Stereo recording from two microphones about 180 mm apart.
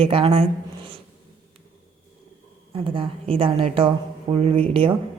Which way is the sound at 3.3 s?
30° right (ahead or behind).